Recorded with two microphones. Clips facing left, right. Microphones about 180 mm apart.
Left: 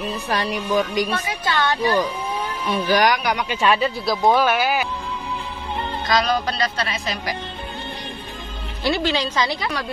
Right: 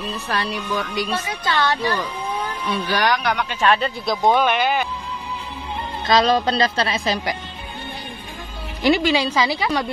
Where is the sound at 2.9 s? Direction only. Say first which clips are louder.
Left 1 dB; 10° left (ahead or behind).